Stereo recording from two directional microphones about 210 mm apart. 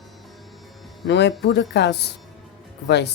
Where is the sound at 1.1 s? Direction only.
55° left (ahead or behind).